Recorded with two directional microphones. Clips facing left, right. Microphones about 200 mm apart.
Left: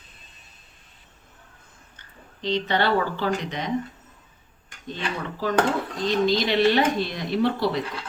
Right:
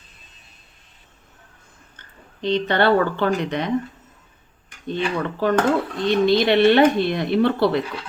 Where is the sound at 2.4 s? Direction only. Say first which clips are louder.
Right 5 dB; 55° right (ahead or behind).